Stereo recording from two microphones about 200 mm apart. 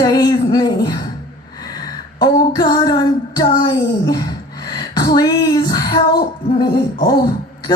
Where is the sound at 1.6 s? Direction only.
20° left (ahead or behind).